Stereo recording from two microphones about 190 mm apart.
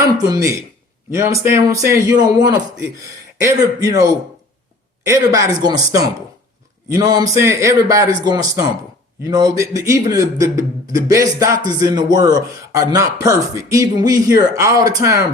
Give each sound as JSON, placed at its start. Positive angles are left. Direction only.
{"t": 0.0, "sound": "speech", "side_deg": -15}